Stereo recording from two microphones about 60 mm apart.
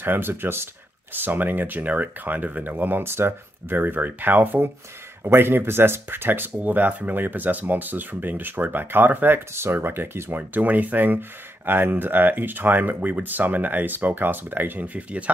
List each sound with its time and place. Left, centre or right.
0.0 s speech: right
9.5 s speech: right
10.3 s speech: right